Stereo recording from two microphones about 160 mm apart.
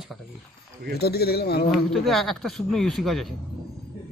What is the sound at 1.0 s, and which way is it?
Speech, 80° left.